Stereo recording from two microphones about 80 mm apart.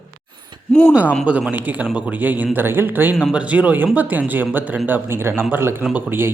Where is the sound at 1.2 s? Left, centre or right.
Centre.